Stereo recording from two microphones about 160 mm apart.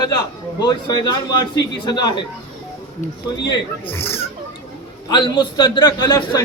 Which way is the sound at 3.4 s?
25° left (ahead or behind).